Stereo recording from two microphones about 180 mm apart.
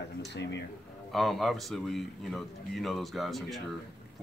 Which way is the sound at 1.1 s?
Centre (ahead or behind).